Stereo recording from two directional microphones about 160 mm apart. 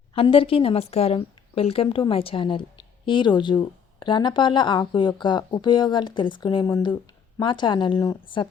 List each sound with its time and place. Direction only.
0.1 s a woman's voice: 35° left (ahead or behind)